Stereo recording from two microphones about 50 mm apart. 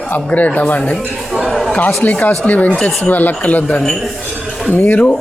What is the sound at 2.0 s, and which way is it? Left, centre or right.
A man's voice, left.